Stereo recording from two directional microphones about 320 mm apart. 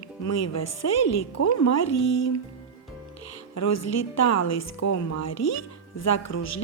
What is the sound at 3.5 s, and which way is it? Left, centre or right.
Speech, left.